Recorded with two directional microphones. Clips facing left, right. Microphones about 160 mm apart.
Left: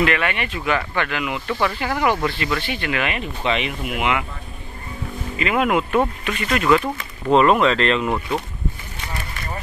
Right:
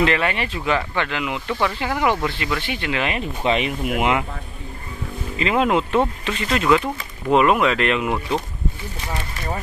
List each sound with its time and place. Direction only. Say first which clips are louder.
0.0 s speech: right 1 dB; 30° right (ahead or behind)
5.4 s speech: right 1 dB; 30° right (ahead or behind); by 8.2 s 10° right (ahead or behind)